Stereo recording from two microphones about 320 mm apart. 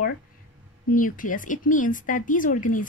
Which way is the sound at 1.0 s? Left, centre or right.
Left.